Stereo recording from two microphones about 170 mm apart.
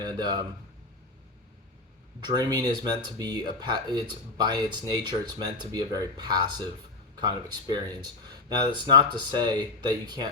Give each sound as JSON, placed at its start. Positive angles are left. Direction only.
{"t": 0.0, "sound": "a man's voice", "side_deg": -25}
{"t": 2.2, "sound": "speech", "side_deg": -25}